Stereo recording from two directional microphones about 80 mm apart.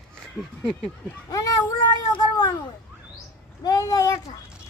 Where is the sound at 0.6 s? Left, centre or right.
Centre.